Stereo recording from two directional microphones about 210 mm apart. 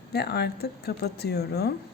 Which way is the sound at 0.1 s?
50° left (ahead or behind).